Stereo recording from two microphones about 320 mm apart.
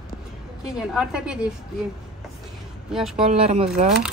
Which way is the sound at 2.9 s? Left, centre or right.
Centre.